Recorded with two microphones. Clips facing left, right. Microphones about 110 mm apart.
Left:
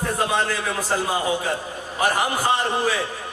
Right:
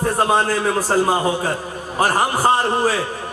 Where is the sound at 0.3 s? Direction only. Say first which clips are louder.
Right 6 dB; 40° right (ahead or behind).